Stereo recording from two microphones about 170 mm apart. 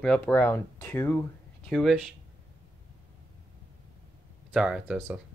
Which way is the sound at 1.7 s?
Centre (ahead or behind).